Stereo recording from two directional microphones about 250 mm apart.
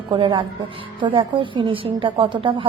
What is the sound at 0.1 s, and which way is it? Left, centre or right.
A woman's voice, centre.